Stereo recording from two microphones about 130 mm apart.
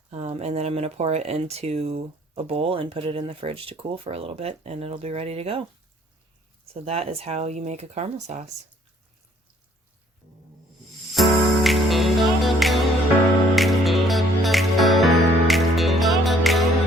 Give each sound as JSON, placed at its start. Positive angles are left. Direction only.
{"t": 0.1, "sound": "speech", "side_deg": -55}
{"t": 6.8, "sound": "speech", "side_deg": -50}
{"t": 11.1, "sound": "music", "side_deg": 0}